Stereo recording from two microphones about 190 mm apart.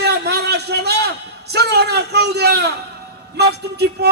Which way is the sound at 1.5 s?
60° right (ahead or behind).